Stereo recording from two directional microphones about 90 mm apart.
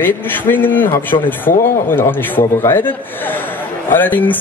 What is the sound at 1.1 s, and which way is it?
Speech, 50° left (ahead or behind).